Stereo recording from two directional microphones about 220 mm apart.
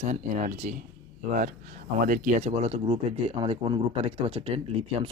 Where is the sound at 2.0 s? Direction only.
35° right (ahead or behind).